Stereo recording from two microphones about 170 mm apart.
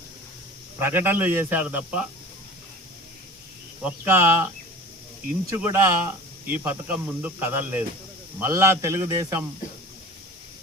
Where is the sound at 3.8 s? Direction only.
15° right (ahead or behind).